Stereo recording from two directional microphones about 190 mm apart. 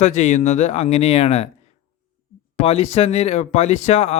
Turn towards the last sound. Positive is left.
turn(degrees=35)  # may be behind; listen again after turning